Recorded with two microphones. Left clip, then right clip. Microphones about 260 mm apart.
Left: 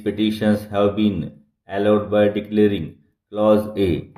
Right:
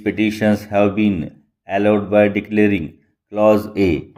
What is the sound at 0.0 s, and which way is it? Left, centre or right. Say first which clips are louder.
Speech: right 3 dB; right.